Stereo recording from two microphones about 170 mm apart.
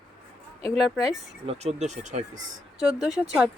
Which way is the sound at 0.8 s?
Centre (ahead or behind).